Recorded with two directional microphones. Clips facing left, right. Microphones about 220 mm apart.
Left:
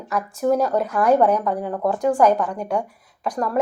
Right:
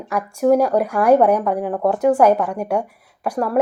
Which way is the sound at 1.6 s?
35° right (ahead or behind).